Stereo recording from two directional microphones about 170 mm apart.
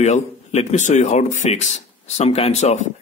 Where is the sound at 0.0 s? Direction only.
40° left (ahead or behind).